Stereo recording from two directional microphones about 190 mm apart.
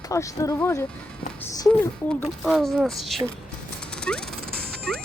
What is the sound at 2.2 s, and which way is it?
A woman's voice, centre (ahead or behind).